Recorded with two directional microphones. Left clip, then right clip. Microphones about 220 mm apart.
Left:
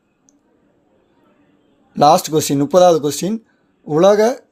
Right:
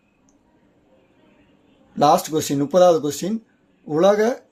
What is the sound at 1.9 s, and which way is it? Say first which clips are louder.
Speech: left 5 dB; 35° left (ahead or behind).